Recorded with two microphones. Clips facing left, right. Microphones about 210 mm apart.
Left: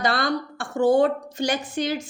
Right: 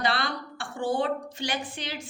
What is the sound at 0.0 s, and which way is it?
A woman's voice, 45° left (ahead or behind).